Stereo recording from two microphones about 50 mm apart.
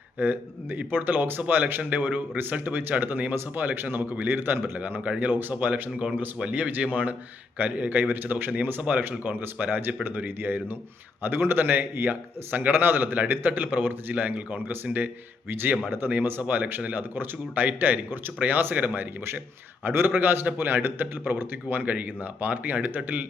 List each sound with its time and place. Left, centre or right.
0.2 s speech: right
8.0 s speech: right
9.0 s speech: right
21.8 s speech: right